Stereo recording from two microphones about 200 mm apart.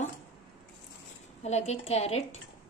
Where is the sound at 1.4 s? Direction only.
35° left (ahead or behind).